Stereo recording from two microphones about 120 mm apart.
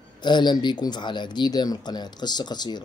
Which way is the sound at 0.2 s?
40° left (ahead or behind).